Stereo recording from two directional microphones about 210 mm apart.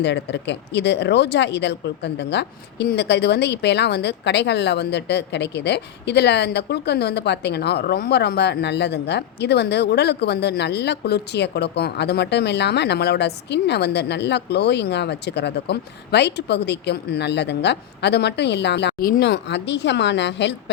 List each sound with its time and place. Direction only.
0.0 s speech: 55° left (ahead or behind)